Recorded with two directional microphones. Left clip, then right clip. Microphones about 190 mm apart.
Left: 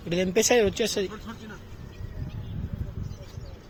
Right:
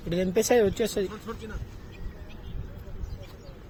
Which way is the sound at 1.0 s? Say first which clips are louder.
Right 1 dB; 55° right (ahead or behind).